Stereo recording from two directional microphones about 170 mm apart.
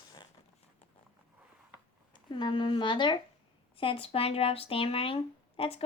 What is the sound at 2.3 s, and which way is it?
Speech, 30° left (ahead or behind).